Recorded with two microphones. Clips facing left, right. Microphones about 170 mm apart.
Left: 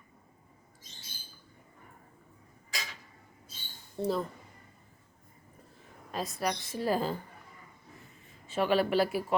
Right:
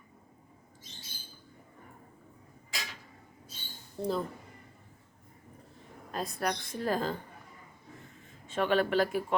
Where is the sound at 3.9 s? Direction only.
Centre (ahead or behind).